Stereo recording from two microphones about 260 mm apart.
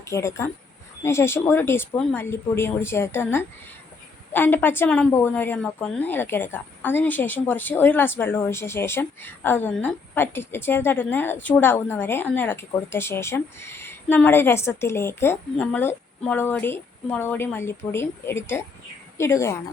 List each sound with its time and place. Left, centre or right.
0.0 s a woman's voice: centre